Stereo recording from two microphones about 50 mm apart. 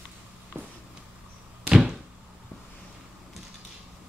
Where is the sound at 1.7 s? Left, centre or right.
Right.